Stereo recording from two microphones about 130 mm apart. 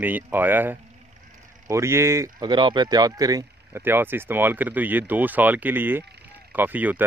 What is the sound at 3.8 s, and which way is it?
Speech, 15° right (ahead or behind).